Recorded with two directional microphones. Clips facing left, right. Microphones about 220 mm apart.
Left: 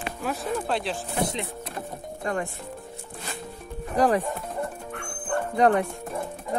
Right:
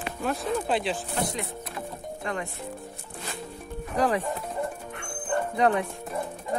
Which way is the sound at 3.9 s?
45° left (ahead or behind).